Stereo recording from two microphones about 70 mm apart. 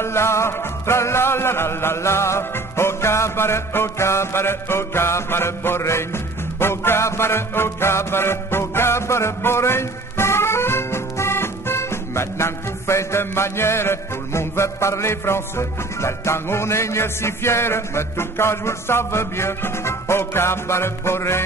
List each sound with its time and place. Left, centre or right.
0.0 s music: left